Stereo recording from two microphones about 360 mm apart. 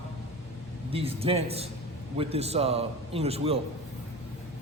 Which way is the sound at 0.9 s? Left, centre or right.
Centre.